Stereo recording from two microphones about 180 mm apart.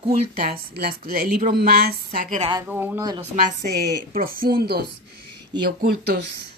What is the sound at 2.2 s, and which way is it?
Speech, 40° right (ahead or behind).